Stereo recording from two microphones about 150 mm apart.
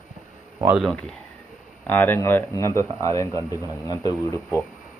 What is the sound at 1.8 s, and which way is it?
Speech, 15° left (ahead or behind).